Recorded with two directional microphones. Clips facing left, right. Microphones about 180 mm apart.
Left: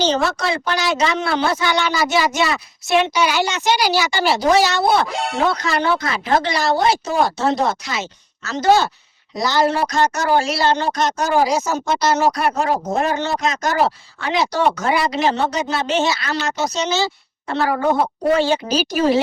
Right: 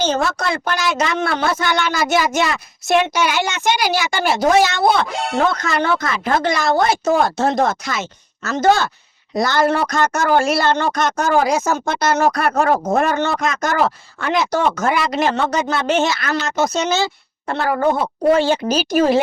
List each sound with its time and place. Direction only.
0.0 s a woman's voice: 50° right (ahead or behind)
5.1 s speech: centre (ahead or behind)
5.5 s a woman's voice: 50° right (ahead or behind)
18.7 s a woman's voice: 50° right (ahead or behind)